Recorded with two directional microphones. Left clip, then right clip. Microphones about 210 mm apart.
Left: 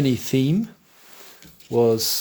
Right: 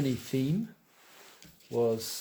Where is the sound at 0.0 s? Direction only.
45° left (ahead or behind).